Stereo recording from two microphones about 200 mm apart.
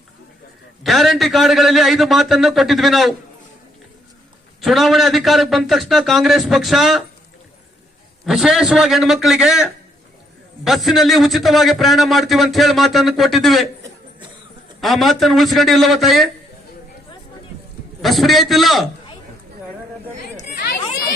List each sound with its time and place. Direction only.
0.9 s a man's voice: centre (ahead or behind)
4.6 s a man's voice: centre (ahead or behind)
8.2 s a man's voice: centre (ahead or behind)
14.8 s a man's voice: centre (ahead or behind)
18.0 s a man's voice: centre (ahead or behind)
20.3 s chatter: 45° left (ahead or behind)